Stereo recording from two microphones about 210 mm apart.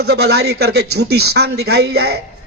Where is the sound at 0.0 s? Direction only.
50° right (ahead or behind).